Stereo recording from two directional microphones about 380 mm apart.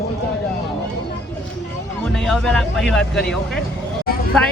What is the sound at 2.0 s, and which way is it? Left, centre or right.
A man's voice, centre.